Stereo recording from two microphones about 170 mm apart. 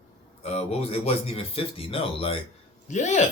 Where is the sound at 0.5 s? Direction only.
35° left (ahead or behind).